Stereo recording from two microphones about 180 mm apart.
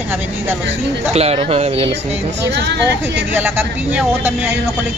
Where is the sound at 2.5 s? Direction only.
70° right (ahead or behind).